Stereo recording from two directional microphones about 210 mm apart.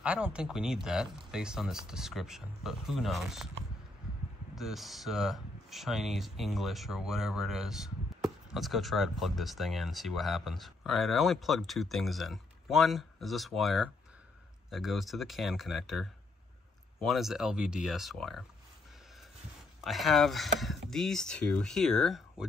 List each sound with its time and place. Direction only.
0.0 s speech: 5° right (ahead or behind)
4.6 s speech: centre (ahead or behind)
19.8 s speech: centre (ahead or behind)